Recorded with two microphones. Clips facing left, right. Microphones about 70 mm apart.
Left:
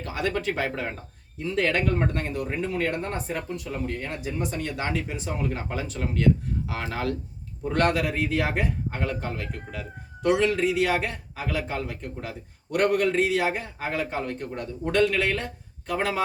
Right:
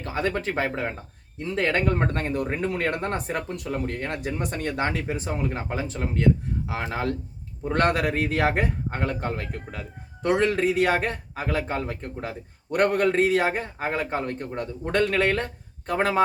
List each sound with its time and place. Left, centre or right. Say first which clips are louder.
0.0 s a man's voice: right 1 dB; right
5.4 s speech: right 1 dB; right
7.7 s a man's voice: right 1 dB; right